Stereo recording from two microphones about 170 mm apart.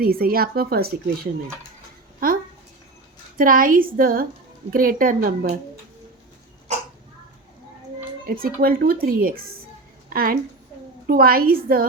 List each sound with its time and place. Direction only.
0.0 s a woman's voice: 60° right (ahead or behind)
3.3 s a woman's voice: 55° right (ahead or behind)
8.3 s a woman's voice: 60° right (ahead or behind)